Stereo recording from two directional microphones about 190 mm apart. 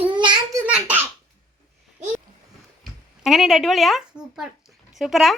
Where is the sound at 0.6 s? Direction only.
5° right (ahead or behind).